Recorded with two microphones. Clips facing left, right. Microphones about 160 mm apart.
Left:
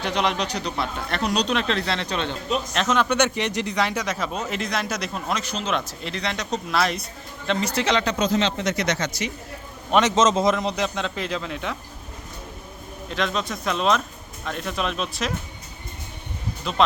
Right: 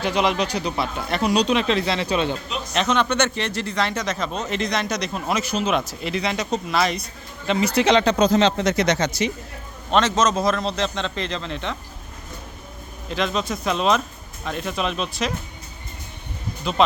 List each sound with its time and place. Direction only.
0.0 s speech: centre (ahead or behind)
5.3 s speech: 10° right (ahead or behind)
8.0 s speech: 35° right (ahead or behind)
9.9 s speech: 15° left (ahead or behind)
13.1 s speech: centre (ahead or behind)
16.7 s speech: centre (ahead or behind)